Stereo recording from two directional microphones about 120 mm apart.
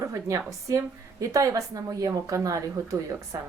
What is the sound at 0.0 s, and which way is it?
A woman's voice, 25° right (ahead or behind).